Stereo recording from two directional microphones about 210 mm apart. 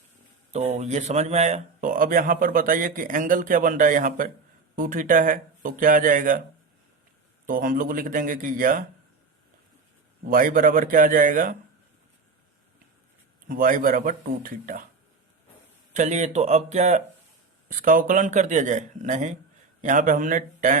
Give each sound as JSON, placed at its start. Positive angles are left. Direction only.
{"t": 0.5, "sound": "speech", "side_deg": -30}
{"t": 7.4, "sound": "speech", "side_deg": -40}
{"t": 10.2, "sound": "speech", "side_deg": -40}
{"t": 13.5, "sound": "speech", "side_deg": -40}
{"t": 15.9, "sound": "speech", "side_deg": -35}